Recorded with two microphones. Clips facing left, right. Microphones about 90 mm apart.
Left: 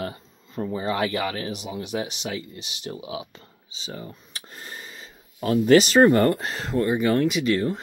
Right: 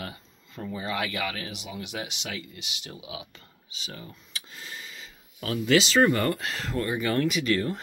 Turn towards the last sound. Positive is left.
turn(degrees=20)  # may be behind; listen again after turning